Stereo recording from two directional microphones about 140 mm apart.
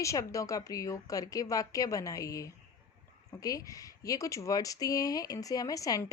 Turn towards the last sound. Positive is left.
turn(degrees=25)  # may be behind; listen again after turning